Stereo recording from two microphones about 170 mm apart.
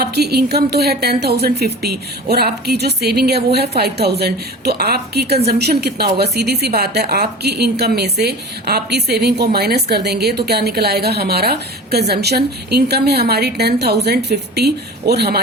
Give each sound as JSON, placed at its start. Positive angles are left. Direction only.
{"t": 0.0, "sound": "a woman's voice", "side_deg": -70}